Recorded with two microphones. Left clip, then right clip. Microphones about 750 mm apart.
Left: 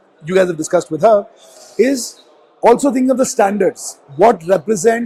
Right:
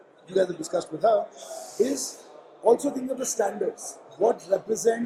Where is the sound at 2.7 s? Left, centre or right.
Left.